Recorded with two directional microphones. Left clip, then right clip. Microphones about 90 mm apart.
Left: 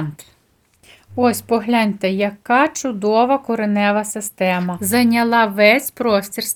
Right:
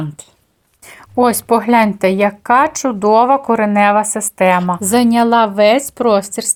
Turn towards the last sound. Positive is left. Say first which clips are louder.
# right 4 dB
turn(degrees=-35)  # may be behind; listen again after turning